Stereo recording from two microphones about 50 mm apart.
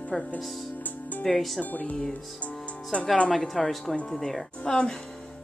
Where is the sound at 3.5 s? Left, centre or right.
Centre.